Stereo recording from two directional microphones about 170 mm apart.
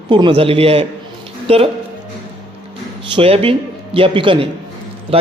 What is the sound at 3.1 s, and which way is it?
A man's voice, 35° right (ahead or behind).